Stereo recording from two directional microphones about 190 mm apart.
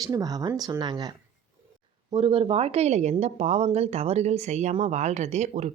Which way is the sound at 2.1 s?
30° right (ahead or behind).